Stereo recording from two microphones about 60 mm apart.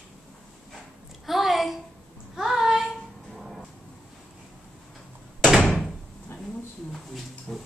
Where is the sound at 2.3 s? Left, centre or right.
Centre.